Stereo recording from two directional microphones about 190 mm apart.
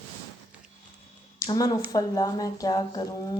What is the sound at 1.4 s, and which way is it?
Speech, 20° left (ahead or behind).